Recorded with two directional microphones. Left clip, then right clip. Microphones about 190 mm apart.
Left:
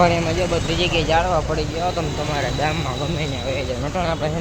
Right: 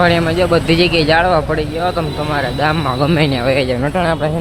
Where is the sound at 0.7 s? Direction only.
90° right.